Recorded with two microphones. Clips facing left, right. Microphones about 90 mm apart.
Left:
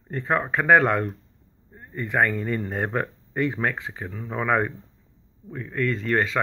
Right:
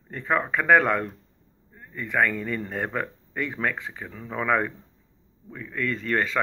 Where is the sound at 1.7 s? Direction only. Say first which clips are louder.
Left 2 dB; 25° left (ahead or behind).